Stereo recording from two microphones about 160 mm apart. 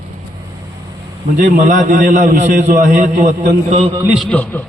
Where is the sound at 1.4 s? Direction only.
55° right (ahead or behind).